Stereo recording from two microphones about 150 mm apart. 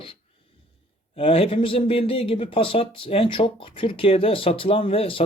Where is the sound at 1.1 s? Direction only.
40° left (ahead or behind).